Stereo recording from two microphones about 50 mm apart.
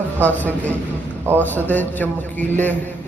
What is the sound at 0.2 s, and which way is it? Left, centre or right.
Mantra, left.